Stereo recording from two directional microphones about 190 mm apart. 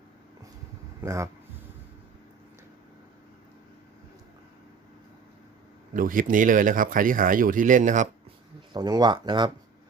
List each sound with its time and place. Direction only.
1.0 s speech: 15° right (ahead or behind)
5.9 s speech: 45° right (ahead or behind)
8.7 s speech: 20° right (ahead or behind)